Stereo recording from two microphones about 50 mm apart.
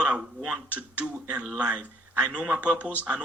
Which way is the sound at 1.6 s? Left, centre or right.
Right.